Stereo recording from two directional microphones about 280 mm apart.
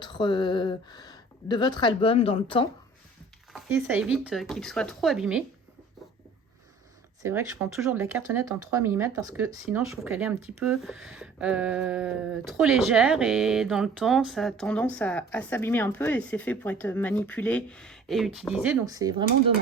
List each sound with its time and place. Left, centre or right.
0.0 s speech: centre
3.5 s speech: centre
7.2 s speech: centre